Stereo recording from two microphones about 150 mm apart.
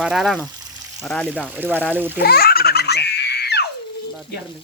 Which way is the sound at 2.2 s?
90° left.